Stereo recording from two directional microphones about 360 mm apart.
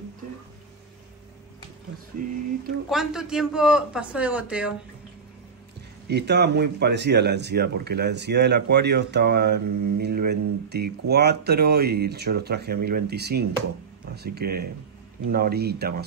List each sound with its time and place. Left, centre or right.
2.9 s a man's voice: centre
6.0 s speech: right